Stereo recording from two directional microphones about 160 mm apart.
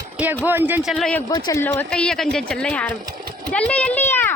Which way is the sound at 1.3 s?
25° left (ahead or behind).